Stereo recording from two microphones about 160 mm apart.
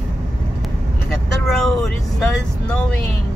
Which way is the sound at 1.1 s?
Centre (ahead or behind).